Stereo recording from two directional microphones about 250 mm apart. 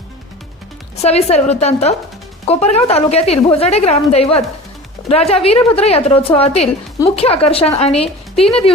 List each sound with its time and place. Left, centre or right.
1.0 s a woman's voice: left